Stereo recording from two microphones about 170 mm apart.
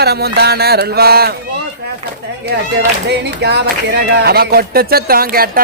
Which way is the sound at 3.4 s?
80° right.